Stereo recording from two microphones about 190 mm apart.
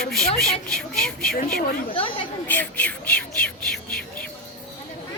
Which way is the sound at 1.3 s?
50° left (ahead or behind).